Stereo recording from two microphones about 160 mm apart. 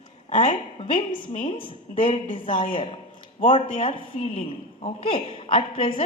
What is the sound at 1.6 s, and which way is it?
Speech, 35° left (ahead or behind).